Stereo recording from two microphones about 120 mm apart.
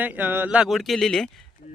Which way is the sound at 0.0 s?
15° right (ahead or behind).